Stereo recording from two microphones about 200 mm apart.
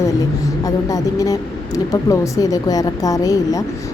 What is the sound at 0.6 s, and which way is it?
A woman's voice, 15° left (ahead or behind).